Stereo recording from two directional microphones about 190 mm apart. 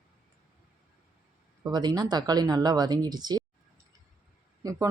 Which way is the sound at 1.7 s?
20° right (ahead or behind).